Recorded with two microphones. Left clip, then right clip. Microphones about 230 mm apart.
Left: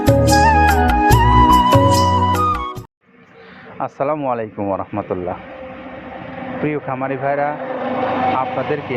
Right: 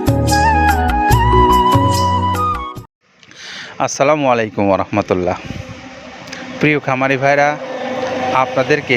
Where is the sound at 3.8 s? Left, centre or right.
Right.